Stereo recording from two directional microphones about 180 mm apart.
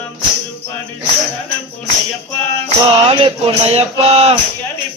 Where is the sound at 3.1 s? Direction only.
30° right (ahead or behind).